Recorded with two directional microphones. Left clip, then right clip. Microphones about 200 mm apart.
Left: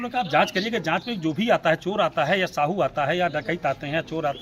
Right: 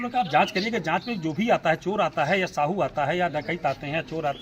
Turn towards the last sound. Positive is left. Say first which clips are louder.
# left 2 dB
turn(degrees=15)  # may be behind; listen again after turning